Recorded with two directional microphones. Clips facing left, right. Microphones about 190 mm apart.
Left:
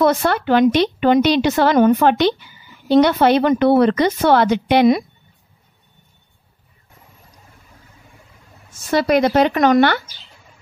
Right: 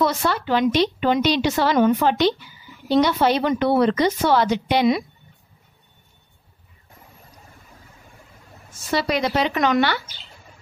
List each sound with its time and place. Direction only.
0.0 s a woman's voice: 55° left (ahead or behind)
8.9 s speech: 50° left (ahead or behind)